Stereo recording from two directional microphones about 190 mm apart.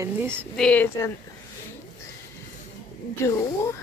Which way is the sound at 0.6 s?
10° left (ahead or behind).